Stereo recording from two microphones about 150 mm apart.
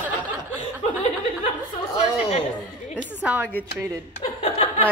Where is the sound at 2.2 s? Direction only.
45° left (ahead or behind).